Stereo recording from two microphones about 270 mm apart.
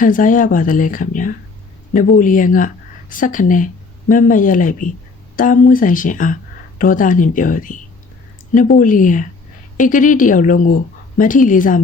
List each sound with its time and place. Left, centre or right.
0.0 s speech: left